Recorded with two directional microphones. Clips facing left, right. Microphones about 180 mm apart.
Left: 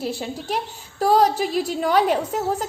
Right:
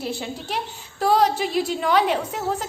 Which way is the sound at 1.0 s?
40° left (ahead or behind).